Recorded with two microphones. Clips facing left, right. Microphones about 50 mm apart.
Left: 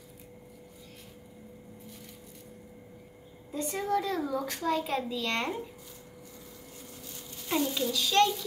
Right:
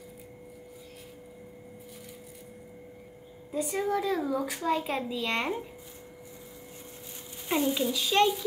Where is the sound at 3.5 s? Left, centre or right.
Centre.